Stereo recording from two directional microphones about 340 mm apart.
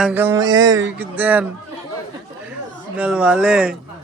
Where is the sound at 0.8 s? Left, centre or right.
Right.